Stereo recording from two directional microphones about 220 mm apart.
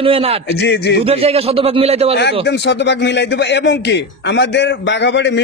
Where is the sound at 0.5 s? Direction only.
50° left (ahead or behind).